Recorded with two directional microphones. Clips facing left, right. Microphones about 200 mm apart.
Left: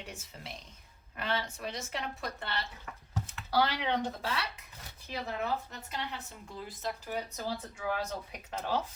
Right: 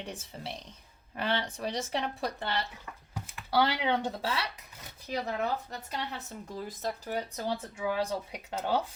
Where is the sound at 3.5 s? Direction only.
30° right (ahead or behind).